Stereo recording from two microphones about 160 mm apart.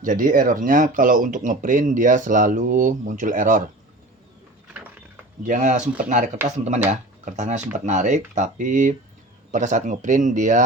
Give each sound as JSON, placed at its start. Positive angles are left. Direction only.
{"t": 0.0, "sound": "speech", "side_deg": -55}
{"t": 5.4, "sound": "speech", "side_deg": -50}